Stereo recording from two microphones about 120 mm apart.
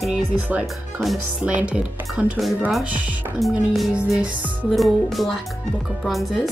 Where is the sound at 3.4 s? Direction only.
Centre (ahead or behind).